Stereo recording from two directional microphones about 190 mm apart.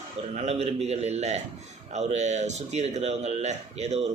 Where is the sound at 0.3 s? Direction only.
30° right (ahead or behind).